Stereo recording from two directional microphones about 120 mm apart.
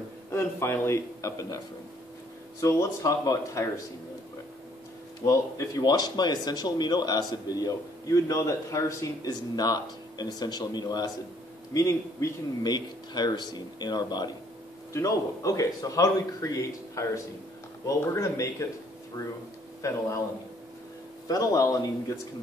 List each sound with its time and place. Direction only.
0.3 s speech: 20° left (ahead or behind)
2.6 s speech: 25° left (ahead or behind)
5.2 s speech: 30° left (ahead or behind)
19.8 s speech: 25° left (ahead or behind)
21.3 s speech: 30° left (ahead or behind)